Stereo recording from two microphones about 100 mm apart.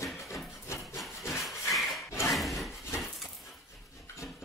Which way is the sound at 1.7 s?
Centre (ahead or behind).